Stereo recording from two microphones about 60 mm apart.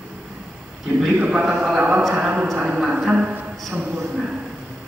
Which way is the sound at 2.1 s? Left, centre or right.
Centre.